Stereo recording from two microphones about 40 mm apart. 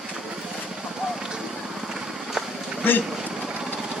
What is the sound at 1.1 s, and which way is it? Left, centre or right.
Run, centre.